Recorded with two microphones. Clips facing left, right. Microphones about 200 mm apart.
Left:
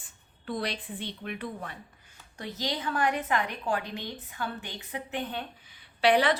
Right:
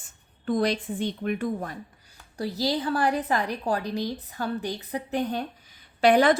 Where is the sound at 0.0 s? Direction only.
45° right (ahead or behind).